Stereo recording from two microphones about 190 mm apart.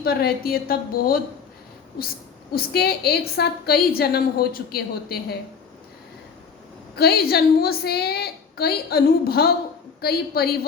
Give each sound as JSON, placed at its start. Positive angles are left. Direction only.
{"t": 0.0, "sound": "a woman's voice", "side_deg": 55}
{"t": 2.5, "sound": "a woman's voice", "side_deg": 55}
{"t": 6.9, "sound": "a woman's voice", "side_deg": 55}